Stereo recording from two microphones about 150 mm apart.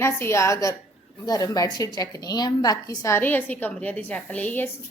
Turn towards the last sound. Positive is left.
turn(degrees=10)  # may be behind; listen again after turning